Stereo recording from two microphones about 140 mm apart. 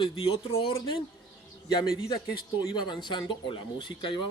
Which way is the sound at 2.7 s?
35° left (ahead or behind).